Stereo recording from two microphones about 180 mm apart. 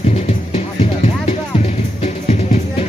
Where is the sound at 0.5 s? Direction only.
40° left (ahead or behind).